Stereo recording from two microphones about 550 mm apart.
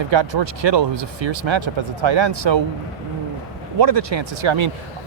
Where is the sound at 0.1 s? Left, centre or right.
Right.